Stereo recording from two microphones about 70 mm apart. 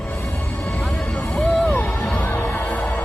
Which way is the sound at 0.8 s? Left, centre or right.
Centre.